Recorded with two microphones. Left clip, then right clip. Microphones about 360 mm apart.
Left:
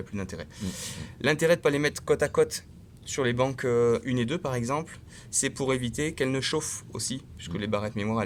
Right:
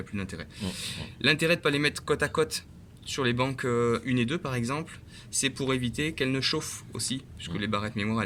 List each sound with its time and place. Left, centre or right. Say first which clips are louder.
0.1 s speech: left 1 dB; centre